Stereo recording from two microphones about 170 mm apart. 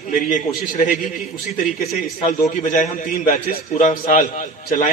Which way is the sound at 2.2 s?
45° left (ahead or behind).